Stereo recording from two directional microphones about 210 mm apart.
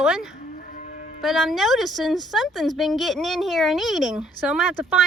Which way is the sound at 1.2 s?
Centre (ahead or behind).